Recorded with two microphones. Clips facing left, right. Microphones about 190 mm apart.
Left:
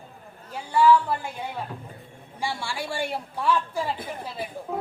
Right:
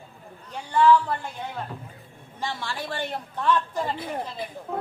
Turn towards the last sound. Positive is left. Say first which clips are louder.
# left 1 dB
turn(degrees=10)  # may be behind; listen again after turning